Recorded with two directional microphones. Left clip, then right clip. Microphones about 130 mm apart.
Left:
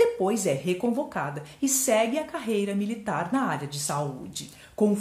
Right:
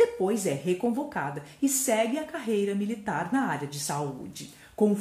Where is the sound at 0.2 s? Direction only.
25° left (ahead or behind).